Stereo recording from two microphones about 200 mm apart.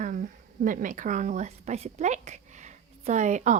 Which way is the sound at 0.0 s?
40° right (ahead or behind).